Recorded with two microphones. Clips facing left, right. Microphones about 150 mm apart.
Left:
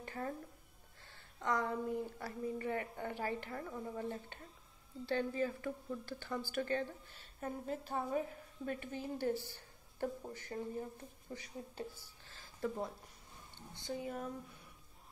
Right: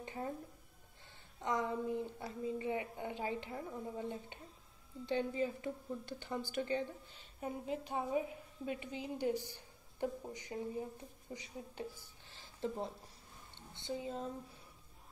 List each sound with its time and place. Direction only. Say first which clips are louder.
0.0 s a sound: even; 20° right (ahead or behind)
1.4 s a woman's voice: even; 20° right (ahead or behind)
13.8 s a woman's voice: right 1 dB; 25° right (ahead or behind)